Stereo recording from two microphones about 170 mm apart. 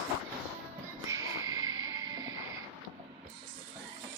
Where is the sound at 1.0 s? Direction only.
20° right (ahead or behind).